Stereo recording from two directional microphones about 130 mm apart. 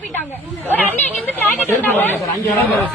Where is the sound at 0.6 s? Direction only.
15° left (ahead or behind).